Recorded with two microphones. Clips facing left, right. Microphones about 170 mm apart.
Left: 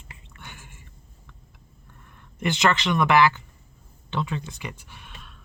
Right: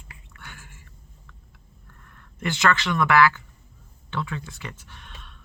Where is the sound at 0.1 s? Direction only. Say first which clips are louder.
Left 1 dB; 20° left (ahead or behind).